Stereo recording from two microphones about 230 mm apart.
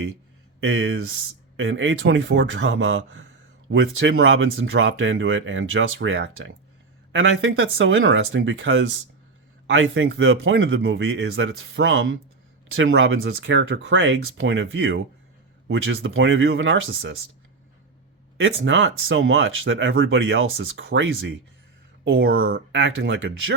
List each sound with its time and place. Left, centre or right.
0.6 s speech: right
18.3 s speech: right